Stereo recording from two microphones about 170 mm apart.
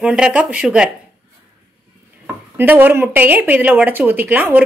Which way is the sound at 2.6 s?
10° right (ahead or behind).